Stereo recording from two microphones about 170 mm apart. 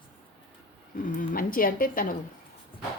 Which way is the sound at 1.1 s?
55° left (ahead or behind).